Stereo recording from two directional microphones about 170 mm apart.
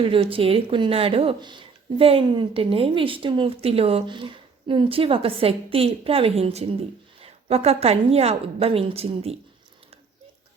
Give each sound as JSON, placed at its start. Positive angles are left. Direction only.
{"t": 0.0, "sound": "speech", "side_deg": -30}